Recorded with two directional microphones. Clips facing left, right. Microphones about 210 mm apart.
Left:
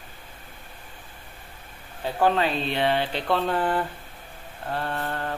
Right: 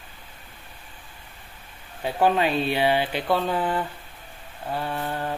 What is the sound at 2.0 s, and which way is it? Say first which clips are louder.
Speech: right 1 dB; 15° right (ahead or behind).